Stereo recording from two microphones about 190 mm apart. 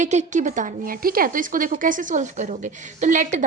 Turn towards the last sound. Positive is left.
turn(degrees=-40)  # may be behind; listen again after turning